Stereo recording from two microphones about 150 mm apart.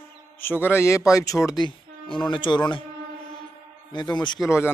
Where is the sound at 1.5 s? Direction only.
30° left (ahead or behind).